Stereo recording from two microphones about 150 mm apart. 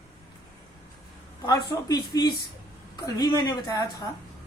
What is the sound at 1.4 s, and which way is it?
A woman's voice, 25° left (ahead or behind).